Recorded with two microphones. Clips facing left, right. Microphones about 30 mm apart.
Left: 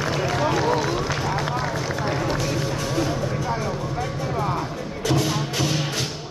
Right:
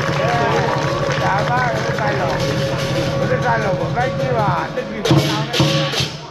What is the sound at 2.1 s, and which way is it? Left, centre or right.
Run, right.